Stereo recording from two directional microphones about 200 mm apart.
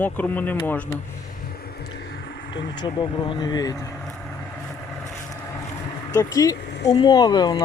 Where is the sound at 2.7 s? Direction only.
20° left (ahead or behind).